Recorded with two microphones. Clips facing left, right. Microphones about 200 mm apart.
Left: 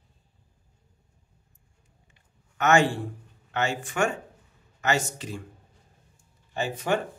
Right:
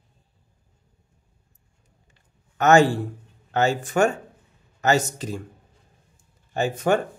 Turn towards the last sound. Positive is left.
turn(degrees=-45)  # may be behind; listen again after turning